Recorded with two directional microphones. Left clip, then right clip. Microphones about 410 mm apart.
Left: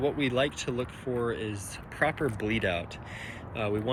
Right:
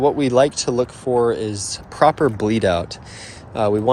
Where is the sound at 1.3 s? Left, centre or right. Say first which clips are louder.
Right 11 dB; right.